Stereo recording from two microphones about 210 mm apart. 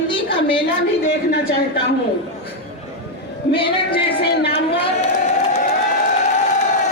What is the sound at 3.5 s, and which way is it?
Speech, 25° left (ahead or behind).